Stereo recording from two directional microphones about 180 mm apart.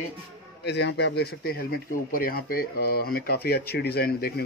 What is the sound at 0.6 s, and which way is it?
Speech, 75° left (ahead or behind).